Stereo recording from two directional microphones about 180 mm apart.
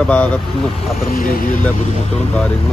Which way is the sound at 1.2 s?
50° left (ahead or behind).